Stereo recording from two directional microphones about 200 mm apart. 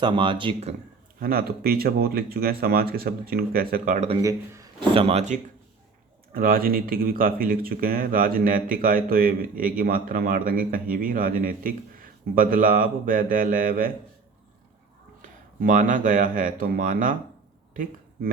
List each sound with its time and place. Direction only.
0.0 s speech: 25° right (ahead or behind)
1.2 s speech: 45° right (ahead or behind)
4.2 s speech: 15° right (ahead or behind); by 5.4 s 35° right (ahead or behind)
6.3 s speech: 45° right (ahead or behind)
15.2 s speech: 40° right (ahead or behind)